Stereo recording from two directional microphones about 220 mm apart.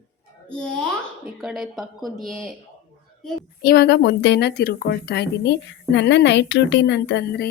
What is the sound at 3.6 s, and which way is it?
Speech, 45° left (ahead or behind).